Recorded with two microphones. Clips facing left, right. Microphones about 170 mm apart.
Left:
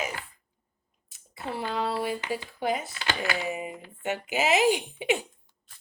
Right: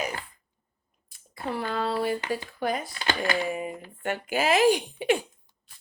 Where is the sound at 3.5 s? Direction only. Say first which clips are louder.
Right 2 dB; 10° left (ahead or behind).